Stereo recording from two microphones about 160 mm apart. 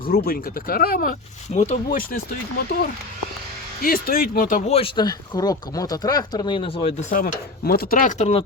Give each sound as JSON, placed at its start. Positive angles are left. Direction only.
{"t": 0.0, "sound": "speech", "side_deg": 70}
{"t": 1.5, "sound": "speech", "side_deg": 45}
{"t": 3.8, "sound": "chopping", "side_deg": 70}
{"t": 4.7, "sound": "speech", "side_deg": 30}
{"t": 7.1, "sound": "chopping", "side_deg": 65}